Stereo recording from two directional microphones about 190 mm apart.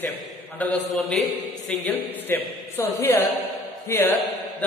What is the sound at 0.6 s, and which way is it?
A man's voice, 5° left (ahead or behind).